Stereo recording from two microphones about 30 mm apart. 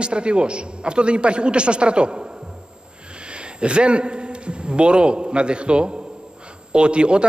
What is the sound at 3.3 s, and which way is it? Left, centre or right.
A man's voice, right.